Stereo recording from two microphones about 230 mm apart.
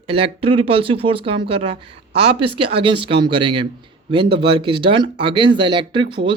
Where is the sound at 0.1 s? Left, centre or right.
Right.